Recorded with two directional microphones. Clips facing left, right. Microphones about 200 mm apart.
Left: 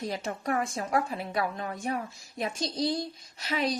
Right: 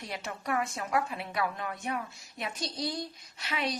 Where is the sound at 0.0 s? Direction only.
35° left (ahead or behind).